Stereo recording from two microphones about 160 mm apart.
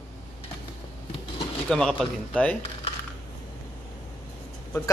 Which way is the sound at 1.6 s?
5° left (ahead or behind).